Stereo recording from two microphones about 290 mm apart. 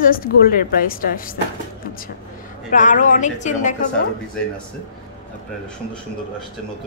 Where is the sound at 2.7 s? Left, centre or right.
Left.